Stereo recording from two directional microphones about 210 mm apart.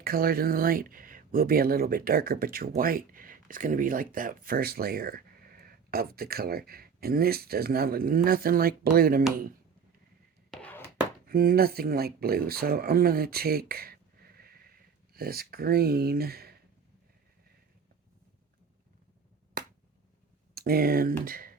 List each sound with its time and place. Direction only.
0.0 s speech: 45° right (ahead or behind)
10.5 s a sound: 5° left (ahead or behind)
11.3 s speech: 45° right (ahead or behind)
20.6 s speech: 45° right (ahead or behind)